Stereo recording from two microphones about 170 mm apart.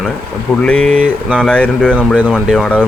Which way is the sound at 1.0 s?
5° right (ahead or behind).